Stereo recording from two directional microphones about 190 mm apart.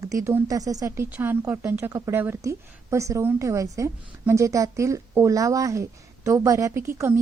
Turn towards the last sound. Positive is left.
turn(degrees=-15)  # may be behind; listen again after turning